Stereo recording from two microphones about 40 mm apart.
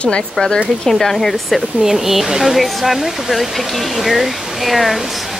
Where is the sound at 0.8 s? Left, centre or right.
Centre.